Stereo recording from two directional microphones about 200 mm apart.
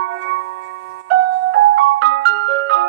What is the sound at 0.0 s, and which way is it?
Music, 70° right (ahead or behind).